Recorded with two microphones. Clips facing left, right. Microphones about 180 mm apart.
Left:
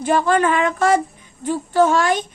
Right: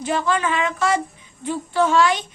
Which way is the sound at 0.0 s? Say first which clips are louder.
Left 5 dB; 50° left (ahead or behind).